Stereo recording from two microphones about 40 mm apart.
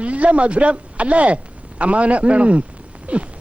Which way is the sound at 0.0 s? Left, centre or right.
Right.